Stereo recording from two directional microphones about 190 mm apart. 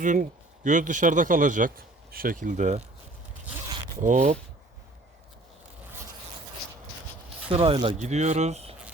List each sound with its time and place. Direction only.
0.0 s speech: 40° right (ahead or behind)
4.0 s speech: 35° right (ahead or behind)
7.4 s speech: 30° right (ahead or behind)